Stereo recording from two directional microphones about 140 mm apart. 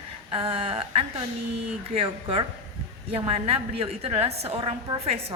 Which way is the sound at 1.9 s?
40° right (ahead or behind).